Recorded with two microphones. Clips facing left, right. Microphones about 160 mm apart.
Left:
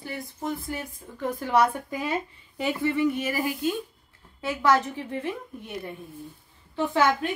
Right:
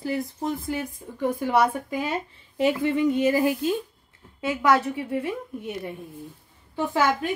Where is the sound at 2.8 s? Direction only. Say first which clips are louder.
Even; 20° right (ahead or behind).